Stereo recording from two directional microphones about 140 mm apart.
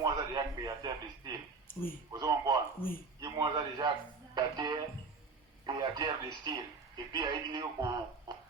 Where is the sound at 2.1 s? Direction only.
30° right (ahead or behind).